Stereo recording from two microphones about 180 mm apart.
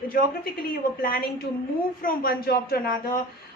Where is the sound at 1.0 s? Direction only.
55° left (ahead or behind).